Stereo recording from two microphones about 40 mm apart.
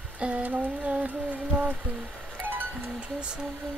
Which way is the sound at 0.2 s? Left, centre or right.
Right.